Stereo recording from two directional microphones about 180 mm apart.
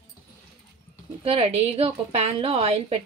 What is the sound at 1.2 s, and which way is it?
A woman's voice, 30° right (ahead or behind).